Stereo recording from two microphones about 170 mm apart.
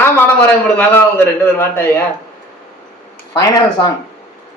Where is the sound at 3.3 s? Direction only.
20° left (ahead or behind).